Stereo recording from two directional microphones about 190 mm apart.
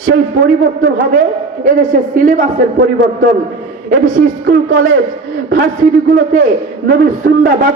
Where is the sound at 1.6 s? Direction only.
45° right (ahead or behind).